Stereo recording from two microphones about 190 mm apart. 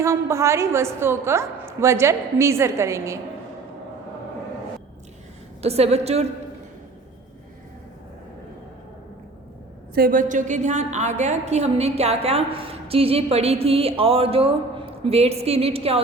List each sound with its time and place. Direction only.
0.0 s a woman's voice: 15° right (ahead or behind)
5.6 s a woman's voice: 35° right (ahead or behind)
9.9 s a woman's voice: 50° right (ahead or behind); by 16.0 s 30° right (ahead or behind)